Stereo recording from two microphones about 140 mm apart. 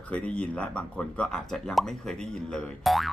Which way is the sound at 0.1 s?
10° left (ahead or behind).